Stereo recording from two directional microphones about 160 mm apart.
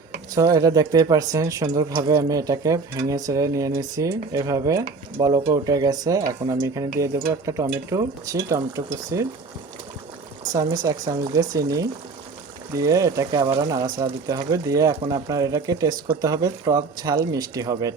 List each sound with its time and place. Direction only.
0.5 s speech: 20° right (ahead or behind)
10.5 s speech: 25° right (ahead or behind)